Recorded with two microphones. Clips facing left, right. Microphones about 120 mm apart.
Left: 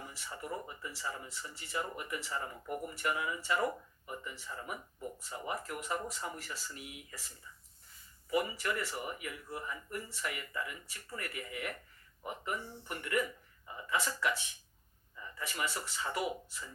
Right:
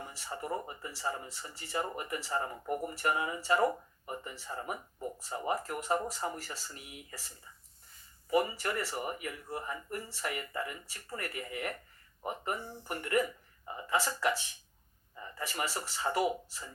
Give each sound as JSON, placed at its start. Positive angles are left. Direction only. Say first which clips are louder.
{"t": 0.1, "sound": "speech", "louder": "right 5 dB", "side_deg": -35}
{"t": 7.5, "sound": "a sound", "louder": "left 1 dB", "side_deg": -45}
{"t": 8.3, "sound": "speech", "louder": "right 3 dB", "side_deg": -40}